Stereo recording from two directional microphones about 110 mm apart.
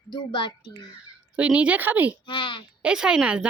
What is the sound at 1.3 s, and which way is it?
Speech, 10° right (ahead or behind).